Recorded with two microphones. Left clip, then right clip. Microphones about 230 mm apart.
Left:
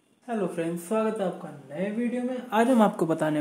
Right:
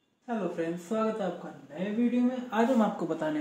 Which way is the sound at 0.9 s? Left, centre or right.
Left.